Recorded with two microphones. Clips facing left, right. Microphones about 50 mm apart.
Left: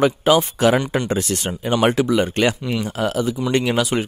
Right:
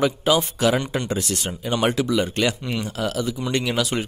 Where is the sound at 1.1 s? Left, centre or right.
Left.